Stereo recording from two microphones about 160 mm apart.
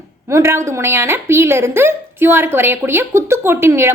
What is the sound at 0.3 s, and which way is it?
A woman's voice, 15° right (ahead or behind).